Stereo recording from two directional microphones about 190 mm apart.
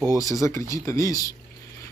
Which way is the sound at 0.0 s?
20° right (ahead or behind).